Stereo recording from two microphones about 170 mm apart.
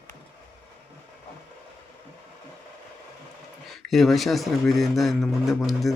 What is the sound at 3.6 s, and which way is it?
Speech, centre (ahead or behind).